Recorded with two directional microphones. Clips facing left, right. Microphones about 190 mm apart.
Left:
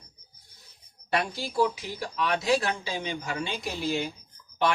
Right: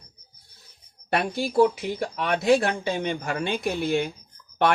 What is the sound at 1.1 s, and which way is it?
Speech, 60° right (ahead or behind).